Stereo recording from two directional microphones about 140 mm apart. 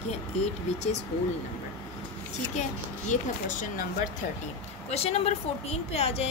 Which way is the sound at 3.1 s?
65° left (ahead or behind).